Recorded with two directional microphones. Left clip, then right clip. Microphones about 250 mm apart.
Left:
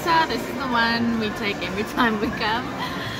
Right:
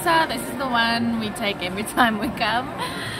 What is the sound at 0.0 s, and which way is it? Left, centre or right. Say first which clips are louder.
A woman's voice: even; right.